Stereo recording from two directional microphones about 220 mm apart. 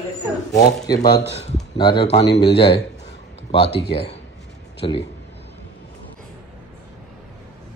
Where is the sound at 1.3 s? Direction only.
30° left (ahead or behind).